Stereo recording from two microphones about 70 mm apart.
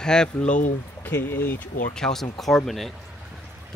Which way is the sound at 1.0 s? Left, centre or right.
Left.